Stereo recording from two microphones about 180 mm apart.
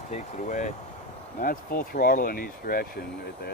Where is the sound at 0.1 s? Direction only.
45° left (ahead or behind).